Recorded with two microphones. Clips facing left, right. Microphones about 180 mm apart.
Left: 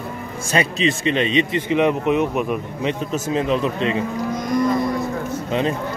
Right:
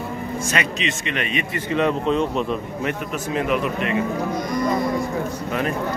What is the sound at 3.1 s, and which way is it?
Speech, 30° left (ahead or behind).